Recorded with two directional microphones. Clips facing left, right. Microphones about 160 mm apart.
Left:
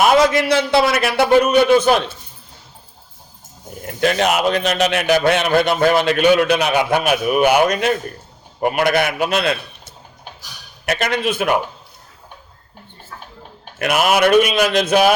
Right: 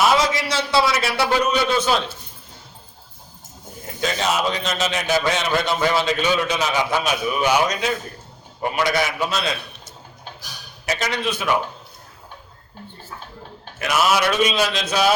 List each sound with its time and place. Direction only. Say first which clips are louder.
0.0 s a man's voice: left 5 dB; 55° left (ahead or behind)
4.0 s a man's voice: left 5 dB; 65° left (ahead or behind)
10.8 s a man's voice: left 4 dB; 55° left (ahead or behind)
13.7 s a man's voice: left 3 dB; 60° left (ahead or behind)